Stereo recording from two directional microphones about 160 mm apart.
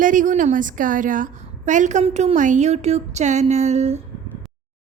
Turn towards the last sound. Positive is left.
turn(degrees=-45)  # may be behind; listen again after turning